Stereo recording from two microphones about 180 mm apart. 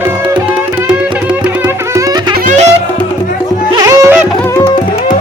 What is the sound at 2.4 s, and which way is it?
Music, 40° right (ahead or behind).